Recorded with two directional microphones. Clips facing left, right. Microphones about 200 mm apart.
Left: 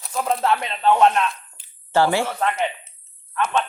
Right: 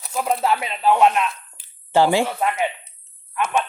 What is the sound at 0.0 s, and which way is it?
Speech, 5° right (ahead or behind).